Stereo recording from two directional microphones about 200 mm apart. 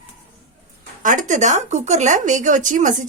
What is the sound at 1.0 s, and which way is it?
Speech, 40° right (ahead or behind).